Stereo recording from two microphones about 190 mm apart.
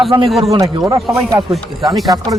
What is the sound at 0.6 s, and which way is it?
Speech, 15° right (ahead or behind).